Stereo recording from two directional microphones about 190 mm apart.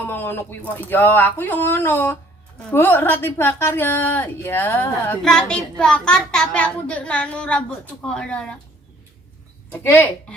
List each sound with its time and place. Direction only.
0.0 s a woman's voice: 10° left (ahead or behind)
9.8 s a woman's voice: 10° left (ahead or behind)